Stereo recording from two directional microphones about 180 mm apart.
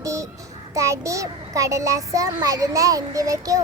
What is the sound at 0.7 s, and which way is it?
A child's voice, 15° right (ahead or behind).